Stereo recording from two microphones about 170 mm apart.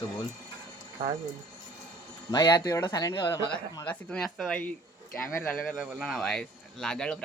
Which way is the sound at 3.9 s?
5° left (ahead or behind).